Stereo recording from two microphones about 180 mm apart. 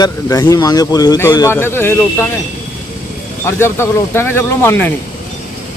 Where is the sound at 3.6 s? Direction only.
15° left (ahead or behind).